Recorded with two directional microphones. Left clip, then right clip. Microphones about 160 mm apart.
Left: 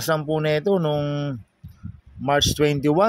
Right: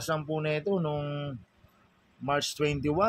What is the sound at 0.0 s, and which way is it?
Speech, 70° left (ahead or behind).